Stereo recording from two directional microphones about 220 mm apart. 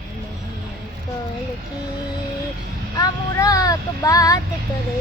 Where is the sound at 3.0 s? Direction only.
15° left (ahead or behind).